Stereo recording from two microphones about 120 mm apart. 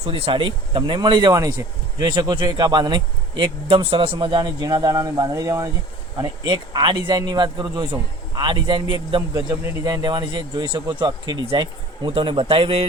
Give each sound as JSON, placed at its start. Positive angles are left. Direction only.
{"t": 0.0, "sound": "speech", "side_deg": -50}
{"t": 4.6, "sound": "speech", "side_deg": -30}